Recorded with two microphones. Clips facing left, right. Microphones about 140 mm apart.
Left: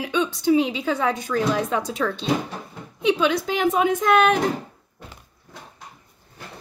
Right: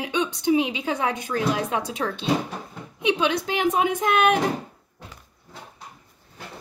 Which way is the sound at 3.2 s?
15° right (ahead or behind).